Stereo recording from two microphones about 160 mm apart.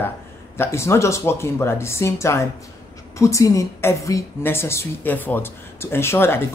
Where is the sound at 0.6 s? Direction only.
15° left (ahead or behind).